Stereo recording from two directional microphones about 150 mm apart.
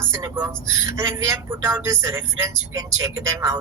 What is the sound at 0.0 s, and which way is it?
Speech, 15° right (ahead or behind).